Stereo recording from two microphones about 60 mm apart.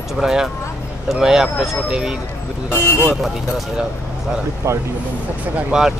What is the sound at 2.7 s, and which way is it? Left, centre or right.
Speech, left.